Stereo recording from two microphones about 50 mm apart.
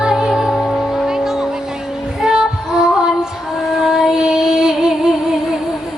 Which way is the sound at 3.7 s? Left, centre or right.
Centre.